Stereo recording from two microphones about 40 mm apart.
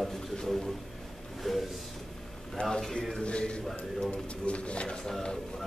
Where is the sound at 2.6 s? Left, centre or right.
Left.